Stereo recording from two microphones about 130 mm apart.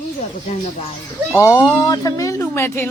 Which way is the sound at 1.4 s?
25° left (ahead or behind).